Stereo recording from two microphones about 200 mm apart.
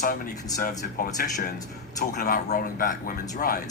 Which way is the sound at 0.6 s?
45° left (ahead or behind).